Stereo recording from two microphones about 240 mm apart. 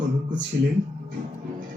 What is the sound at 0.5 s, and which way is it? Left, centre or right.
Speech, right.